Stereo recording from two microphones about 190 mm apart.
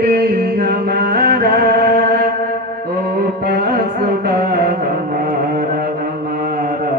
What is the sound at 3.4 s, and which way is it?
Music, 55° right (ahead or behind).